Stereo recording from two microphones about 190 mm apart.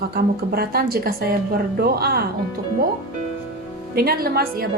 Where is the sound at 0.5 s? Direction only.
55° right (ahead or behind).